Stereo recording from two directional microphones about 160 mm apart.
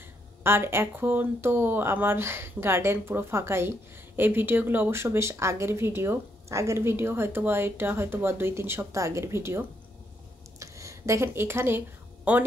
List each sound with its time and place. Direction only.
0.4 s speech: 15° right (ahead or behind)